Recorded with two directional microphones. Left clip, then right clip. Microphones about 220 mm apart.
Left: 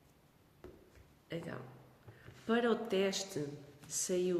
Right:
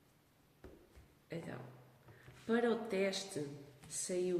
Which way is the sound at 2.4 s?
30° left (ahead or behind).